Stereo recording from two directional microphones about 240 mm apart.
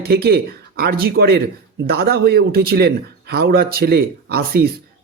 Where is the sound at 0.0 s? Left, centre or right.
Right.